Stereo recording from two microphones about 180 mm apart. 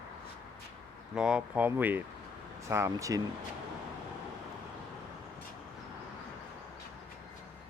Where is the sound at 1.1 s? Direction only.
5° right (ahead or behind).